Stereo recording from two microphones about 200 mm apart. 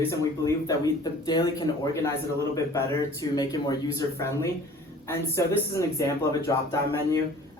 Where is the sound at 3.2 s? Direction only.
20° left (ahead or behind).